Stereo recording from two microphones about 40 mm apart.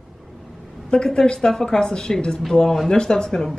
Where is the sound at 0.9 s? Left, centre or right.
Left.